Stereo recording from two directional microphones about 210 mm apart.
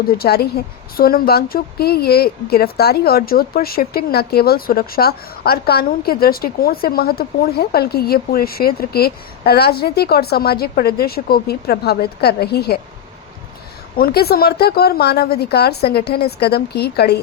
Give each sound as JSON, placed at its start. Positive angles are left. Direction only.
{"t": 0.2, "sound": "speech", "side_deg": 50}
{"t": 13.9, "sound": "speech", "side_deg": 45}